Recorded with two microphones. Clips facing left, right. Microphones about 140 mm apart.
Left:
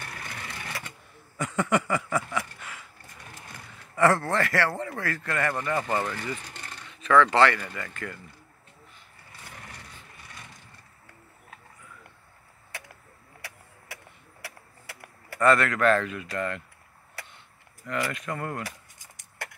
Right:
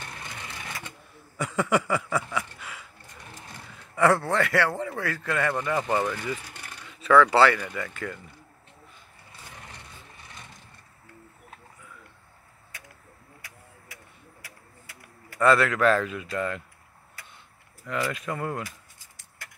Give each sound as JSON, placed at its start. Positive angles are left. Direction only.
{"t": 0.0, "sound": "vehicle", "side_deg": -20}
{"t": 1.4, "sound": "a sound", "side_deg": -5}
{"t": 3.9, "sound": "a man's voice", "side_deg": 0}
{"t": 5.6, "sound": "speech", "side_deg": -15}
{"t": 13.4, "sound": "vehicle", "side_deg": 70}
{"t": 13.9, "sound": "a sound", "side_deg": 70}
{"t": 15.3, "sound": "speech", "side_deg": -5}
{"t": 17.2, "sound": "a sound", "side_deg": 70}
{"t": 17.8, "sound": "speech", "side_deg": -5}
{"t": 19.4, "sound": "chop", "side_deg": 70}